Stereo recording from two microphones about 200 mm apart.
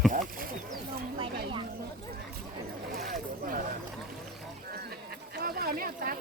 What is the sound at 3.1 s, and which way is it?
Speech, 45° right (ahead or behind).